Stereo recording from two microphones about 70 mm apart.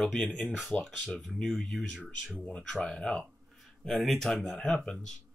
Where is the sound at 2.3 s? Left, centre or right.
Centre.